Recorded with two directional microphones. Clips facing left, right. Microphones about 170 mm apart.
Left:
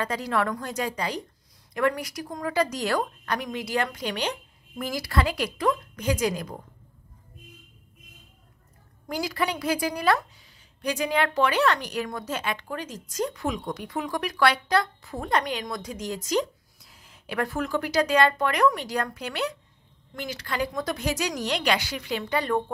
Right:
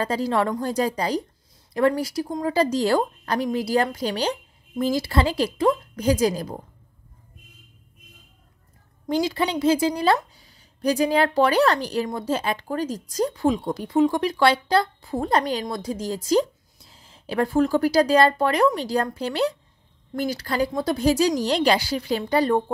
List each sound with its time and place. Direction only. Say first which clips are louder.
0.0 s a woman's voice: right 4 dB; 30° right (ahead or behind)
9.0 s a woman's voice: right 5 dB; 25° right (ahead or behind)